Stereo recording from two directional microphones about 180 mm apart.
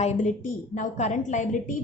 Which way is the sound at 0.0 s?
40° left (ahead or behind).